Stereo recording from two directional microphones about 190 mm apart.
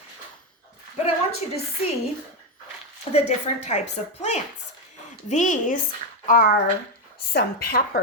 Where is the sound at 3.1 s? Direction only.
35° left (ahead or behind).